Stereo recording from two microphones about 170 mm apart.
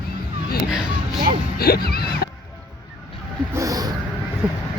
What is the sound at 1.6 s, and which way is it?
Music, 65° left (ahead or behind).